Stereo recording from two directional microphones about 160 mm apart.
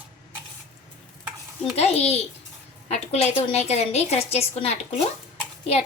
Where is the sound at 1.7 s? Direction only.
40° left (ahead or behind).